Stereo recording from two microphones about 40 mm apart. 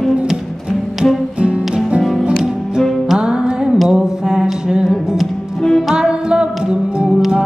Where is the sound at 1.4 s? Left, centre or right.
Right.